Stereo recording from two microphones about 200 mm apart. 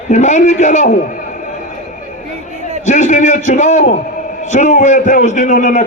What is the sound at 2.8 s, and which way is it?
A man's voice, 35° left (ahead or behind).